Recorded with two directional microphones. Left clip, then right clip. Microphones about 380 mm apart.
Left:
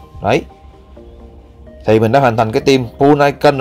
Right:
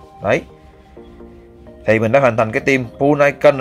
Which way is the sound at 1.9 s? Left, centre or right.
Centre.